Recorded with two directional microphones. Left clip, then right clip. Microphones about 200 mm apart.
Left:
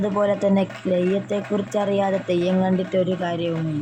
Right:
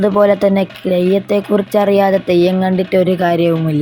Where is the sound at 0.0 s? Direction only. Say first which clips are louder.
Right 10 dB; 25° right (ahead or behind).